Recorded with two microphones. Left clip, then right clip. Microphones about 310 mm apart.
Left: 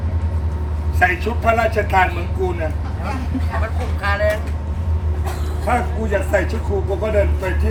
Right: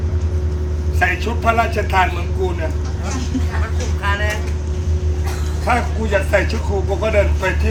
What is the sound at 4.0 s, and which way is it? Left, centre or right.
Speech, centre.